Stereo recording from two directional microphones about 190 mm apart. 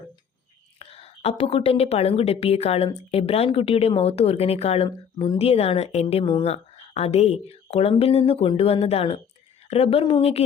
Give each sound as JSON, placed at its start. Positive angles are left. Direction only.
{"t": 0.8, "sound": "a woman's voice", "side_deg": 30}